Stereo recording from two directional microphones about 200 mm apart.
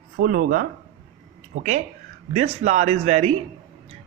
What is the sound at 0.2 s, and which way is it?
Speech, 45° right (ahead or behind).